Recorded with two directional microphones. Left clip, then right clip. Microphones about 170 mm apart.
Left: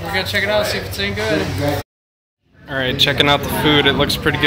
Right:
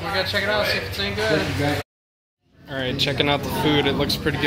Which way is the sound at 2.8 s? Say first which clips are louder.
Left 7 dB; centre (ahead or behind).